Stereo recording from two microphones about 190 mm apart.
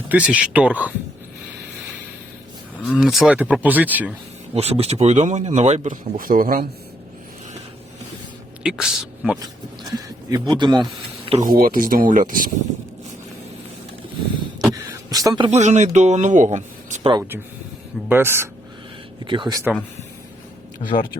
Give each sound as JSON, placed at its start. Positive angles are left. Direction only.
{"t": 0.1, "sound": "speech", "side_deg": -5}
{"t": 2.8, "sound": "speech", "side_deg": 0}
{"t": 4.5, "sound": "speech", "side_deg": -35}
{"t": 8.6, "sound": "speech", "side_deg": -5}
{"t": 9.9, "sound": "speech", "side_deg": -20}
{"t": 11.4, "sound": "speech", "side_deg": -50}
{"t": 14.7, "sound": "a sound", "side_deg": -20}
{"t": 15.4, "sound": "speech", "side_deg": -35}
{"t": 17.1, "sound": "speech", "side_deg": -15}
{"t": 19.2, "sound": "speech", "side_deg": -25}
{"t": 20.7, "sound": "speech", "side_deg": 25}